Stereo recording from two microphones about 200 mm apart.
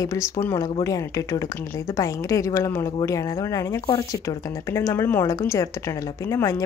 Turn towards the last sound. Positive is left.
turn(degrees=15)  # may be behind; listen again after turning